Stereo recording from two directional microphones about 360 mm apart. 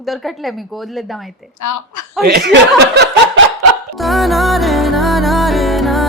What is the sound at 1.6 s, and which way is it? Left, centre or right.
Speech, left.